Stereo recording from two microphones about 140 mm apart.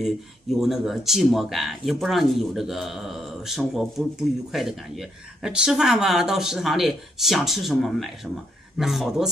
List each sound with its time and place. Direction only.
0.0 s speech: centre (ahead or behind)